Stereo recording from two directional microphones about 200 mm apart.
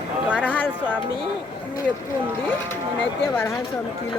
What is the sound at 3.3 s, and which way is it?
Speech, 10° left (ahead or behind).